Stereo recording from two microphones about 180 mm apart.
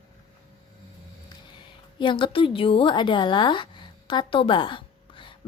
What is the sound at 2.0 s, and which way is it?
A woman's voice, 25° left (ahead or behind).